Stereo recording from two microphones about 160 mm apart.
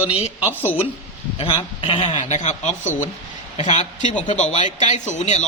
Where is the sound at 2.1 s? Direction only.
45° left (ahead or behind).